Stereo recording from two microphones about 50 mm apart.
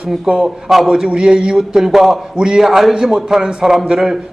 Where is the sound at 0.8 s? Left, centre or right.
Centre.